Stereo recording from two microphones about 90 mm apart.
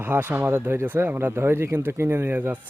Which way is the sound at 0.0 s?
20° right (ahead or behind).